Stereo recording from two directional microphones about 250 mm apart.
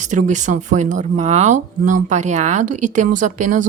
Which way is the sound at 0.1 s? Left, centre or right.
Right.